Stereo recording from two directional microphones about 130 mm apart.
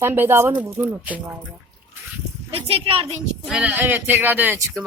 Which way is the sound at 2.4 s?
45° right (ahead or behind).